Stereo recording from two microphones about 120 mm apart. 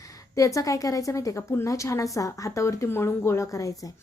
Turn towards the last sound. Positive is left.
turn(degrees=25)  # may be behind; listen again after turning